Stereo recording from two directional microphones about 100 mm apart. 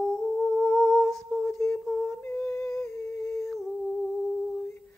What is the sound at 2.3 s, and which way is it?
Humming, 25° left (ahead or behind).